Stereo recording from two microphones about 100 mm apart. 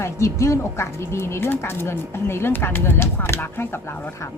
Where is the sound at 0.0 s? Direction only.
30° left (ahead or behind).